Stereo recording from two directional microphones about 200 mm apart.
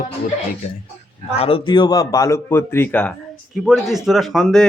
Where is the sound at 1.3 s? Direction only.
30° left (ahead or behind).